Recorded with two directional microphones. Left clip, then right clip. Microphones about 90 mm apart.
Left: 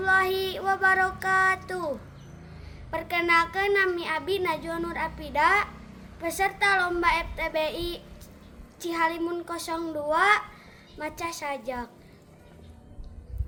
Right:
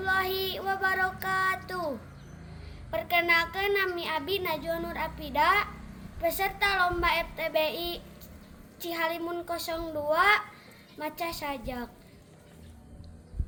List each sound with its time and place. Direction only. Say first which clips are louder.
0.0 s child singing: left 5 dB; 30° left (ahead or behind)
2.9 s a woman's voice: left 1 dB; 30° left (ahead or behind)